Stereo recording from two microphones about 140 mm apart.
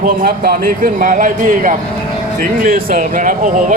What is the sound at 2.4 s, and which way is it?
Speech, 85° right.